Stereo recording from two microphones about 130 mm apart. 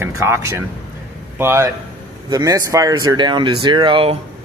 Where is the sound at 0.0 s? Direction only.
20° right (ahead or behind); by 4.2 s 45° right (ahead or behind).